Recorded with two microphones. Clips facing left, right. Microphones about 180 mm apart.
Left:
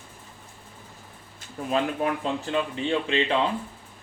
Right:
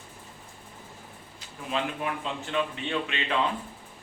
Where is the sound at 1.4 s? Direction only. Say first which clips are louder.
Left 5 dB; 45° left (ahead or behind).